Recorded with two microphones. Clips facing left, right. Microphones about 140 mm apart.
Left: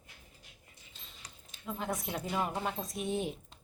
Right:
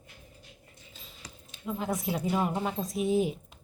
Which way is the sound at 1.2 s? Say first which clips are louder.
Right 6 dB; 90° right.